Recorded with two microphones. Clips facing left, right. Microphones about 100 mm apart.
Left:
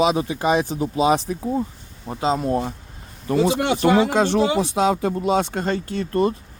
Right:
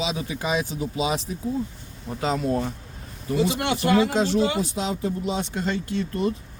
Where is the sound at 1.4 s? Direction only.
40° left (ahead or behind).